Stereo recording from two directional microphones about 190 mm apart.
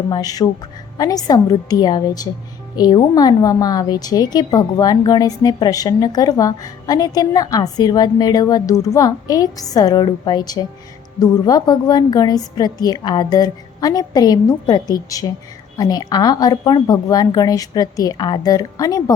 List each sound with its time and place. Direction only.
0.1 s a woman's voice: 20° left (ahead or behind)